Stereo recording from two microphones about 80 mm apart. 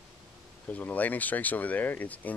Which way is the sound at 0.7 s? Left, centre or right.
Centre.